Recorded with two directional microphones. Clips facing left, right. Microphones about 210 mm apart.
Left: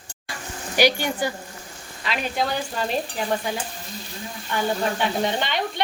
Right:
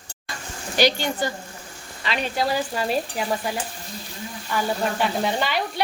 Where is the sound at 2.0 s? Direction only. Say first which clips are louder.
Right 1 dB; centre (ahead or behind).